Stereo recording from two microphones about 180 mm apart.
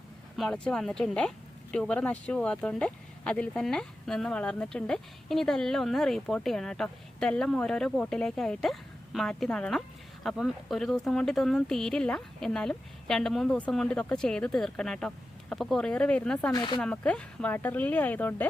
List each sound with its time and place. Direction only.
0.3 s speech: 5° left (ahead or behind)
16.5 s speech: 25° left (ahead or behind)
16.8 s speech: 5° left (ahead or behind)